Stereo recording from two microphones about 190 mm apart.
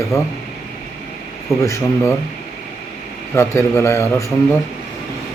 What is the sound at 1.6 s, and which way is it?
Speech, 15° left (ahead or behind).